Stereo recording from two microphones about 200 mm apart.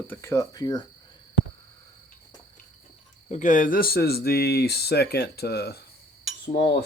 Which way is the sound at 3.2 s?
40° left (ahead or behind).